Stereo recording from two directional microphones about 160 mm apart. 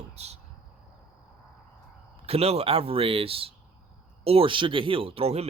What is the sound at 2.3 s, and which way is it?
Speech, 40° right (ahead or behind).